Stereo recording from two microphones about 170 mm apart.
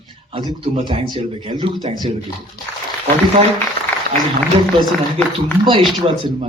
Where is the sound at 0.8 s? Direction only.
30° right (ahead or behind).